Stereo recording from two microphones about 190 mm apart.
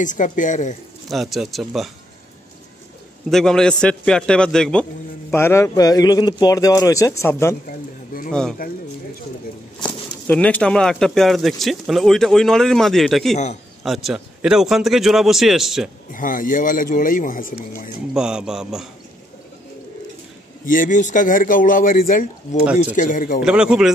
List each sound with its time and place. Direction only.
0.0 s a woman's voice: 40° left (ahead or behind)
1.0 s speech: centre (ahead or behind)
3.3 s speech: centre (ahead or behind)
9.8 s speech: 5° left (ahead or behind)
16.1 s speech: 45° left (ahead or behind)
18.1 s speech: 5° right (ahead or behind)
20.6 s speech: 45° left (ahead or behind)
23.4 s speech: 5° right (ahead or behind)